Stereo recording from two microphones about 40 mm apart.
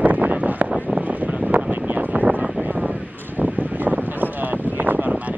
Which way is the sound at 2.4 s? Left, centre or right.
Right.